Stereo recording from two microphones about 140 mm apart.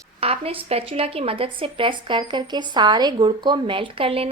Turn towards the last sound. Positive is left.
turn(degrees=-40)  # may be behind; listen again after turning